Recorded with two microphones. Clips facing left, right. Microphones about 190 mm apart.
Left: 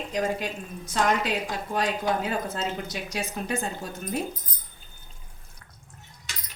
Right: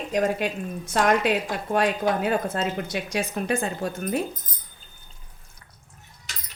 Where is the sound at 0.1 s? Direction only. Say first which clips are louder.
Right 5 dB; 55° right (ahead or behind).